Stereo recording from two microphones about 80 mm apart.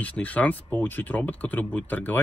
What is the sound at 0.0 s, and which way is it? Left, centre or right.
Speech, centre.